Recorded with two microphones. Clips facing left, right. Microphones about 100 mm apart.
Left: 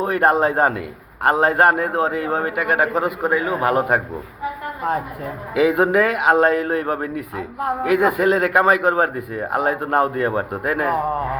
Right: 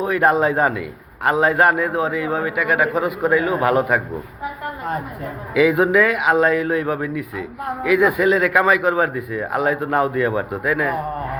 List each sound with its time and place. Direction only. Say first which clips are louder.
0.0 s a man's voice: even; 35° left (ahead or behind)
5.5 s speech: right 1 dB; 40° left (ahead or behind)